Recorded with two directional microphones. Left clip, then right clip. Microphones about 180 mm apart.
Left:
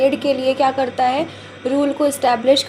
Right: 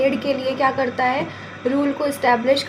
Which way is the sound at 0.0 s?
35° left (ahead or behind).